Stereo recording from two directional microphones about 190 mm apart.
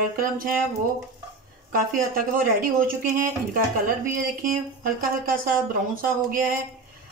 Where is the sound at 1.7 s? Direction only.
50° right (ahead or behind).